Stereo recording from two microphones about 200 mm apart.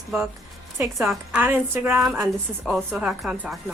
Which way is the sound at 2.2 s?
Centre (ahead or behind).